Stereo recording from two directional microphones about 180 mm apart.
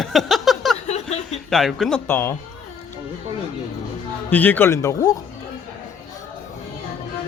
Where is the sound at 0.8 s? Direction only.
35° left (ahead or behind).